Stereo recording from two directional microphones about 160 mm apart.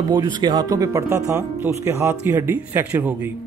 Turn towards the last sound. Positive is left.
turn(degrees=-10)  # may be behind; listen again after turning